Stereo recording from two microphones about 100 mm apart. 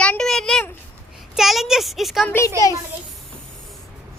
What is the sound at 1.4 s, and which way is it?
Speech, 5° right (ahead or behind).